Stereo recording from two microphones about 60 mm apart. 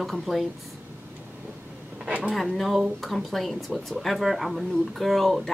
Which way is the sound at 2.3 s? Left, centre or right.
Centre.